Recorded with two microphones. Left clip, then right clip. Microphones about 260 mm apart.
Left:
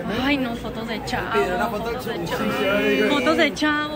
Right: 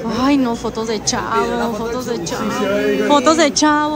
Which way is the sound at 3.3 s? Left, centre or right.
Centre.